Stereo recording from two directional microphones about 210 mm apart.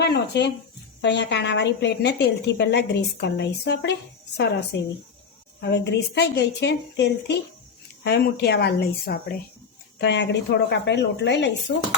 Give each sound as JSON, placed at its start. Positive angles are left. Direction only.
{"t": 0.0, "sound": "a woman's voice", "side_deg": 55}
{"t": 5.5, "sound": "a woman's voice", "side_deg": 55}